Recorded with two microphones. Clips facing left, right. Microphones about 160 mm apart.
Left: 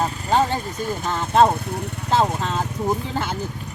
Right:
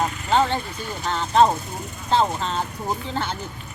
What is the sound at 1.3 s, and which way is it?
Speech, 60° left (ahead or behind).